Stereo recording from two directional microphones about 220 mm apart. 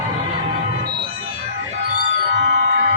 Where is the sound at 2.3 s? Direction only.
55° right (ahead or behind).